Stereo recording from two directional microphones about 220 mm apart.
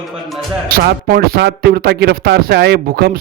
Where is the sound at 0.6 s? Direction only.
40° right (ahead or behind).